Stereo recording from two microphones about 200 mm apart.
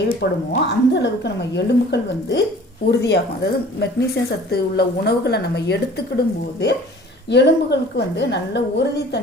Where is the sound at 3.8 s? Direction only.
55° left (ahead or behind).